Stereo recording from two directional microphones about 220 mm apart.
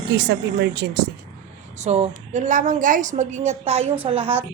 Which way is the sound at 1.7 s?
30° right (ahead or behind).